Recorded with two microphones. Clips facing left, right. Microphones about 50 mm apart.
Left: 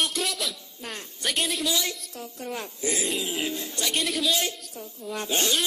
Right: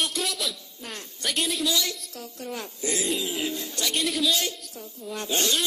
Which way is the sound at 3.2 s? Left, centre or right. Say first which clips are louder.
Even; left.